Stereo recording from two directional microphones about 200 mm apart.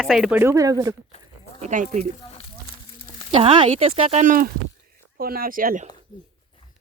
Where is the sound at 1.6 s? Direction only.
40° right (ahead or behind).